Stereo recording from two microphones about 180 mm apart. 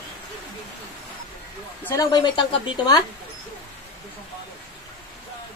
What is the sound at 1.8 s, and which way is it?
A woman's voice, 15° left (ahead or behind).